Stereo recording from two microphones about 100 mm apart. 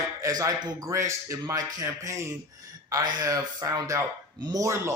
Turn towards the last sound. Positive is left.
turn(degrees=-30)  # may be behind; listen again after turning